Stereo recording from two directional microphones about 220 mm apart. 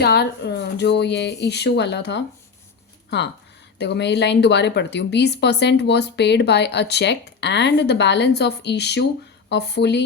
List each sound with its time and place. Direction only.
0.0 s speech: 50° left (ahead or behind)
3.8 s speech: 50° left (ahead or behind)